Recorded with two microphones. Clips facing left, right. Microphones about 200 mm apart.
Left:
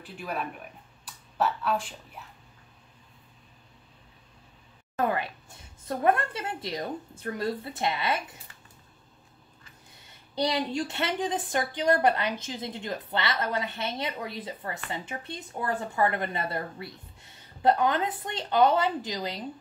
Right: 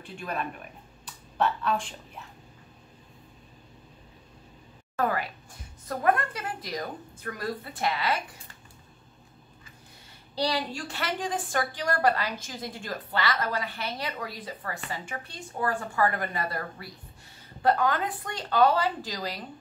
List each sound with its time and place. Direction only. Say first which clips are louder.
0.0 s speech: even; 5° left (ahead or behind)
4.9 s a woman's voice: even; 20° left (ahead or behind)
10.3 s a woman's voice: left 2 dB; 20° left (ahead or behind)